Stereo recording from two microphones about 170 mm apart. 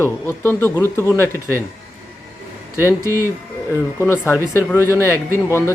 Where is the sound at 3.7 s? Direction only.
15° left (ahead or behind).